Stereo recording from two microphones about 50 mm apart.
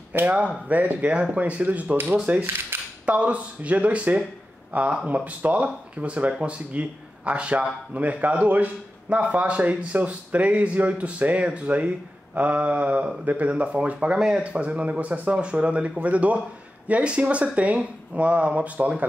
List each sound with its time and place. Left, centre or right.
0.1 s speech: right
2.7 s cutlery: right
3.1 s speech: right
14.1 s speech: centre
14.4 s speech: right